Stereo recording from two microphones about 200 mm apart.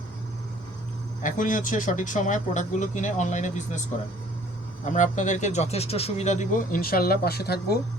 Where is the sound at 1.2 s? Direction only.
40° left (ahead or behind).